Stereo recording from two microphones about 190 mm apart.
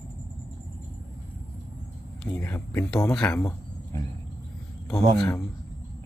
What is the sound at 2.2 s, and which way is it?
Speech, 10° left (ahead or behind).